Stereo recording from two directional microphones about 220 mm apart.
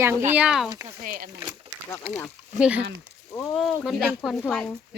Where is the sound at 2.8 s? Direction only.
50° right (ahead or behind).